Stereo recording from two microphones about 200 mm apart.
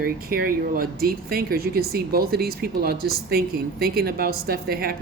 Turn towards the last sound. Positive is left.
turn(degrees=-50)  # may be behind; listen again after turning